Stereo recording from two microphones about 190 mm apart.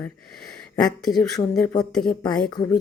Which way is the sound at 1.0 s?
5° left (ahead or behind).